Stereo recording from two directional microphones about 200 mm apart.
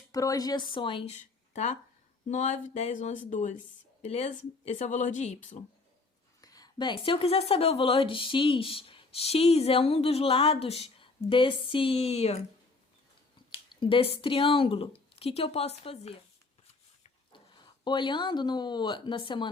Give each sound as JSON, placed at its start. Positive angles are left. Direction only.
{"t": 0.1, "sound": "speech", "side_deg": 15}
{"t": 2.3, "sound": "a woman's voice", "side_deg": 35}
{"t": 6.4, "sound": "speech", "side_deg": 20}
{"t": 13.7, "sound": "speech", "side_deg": 25}
{"t": 17.8, "sound": "speech", "side_deg": 25}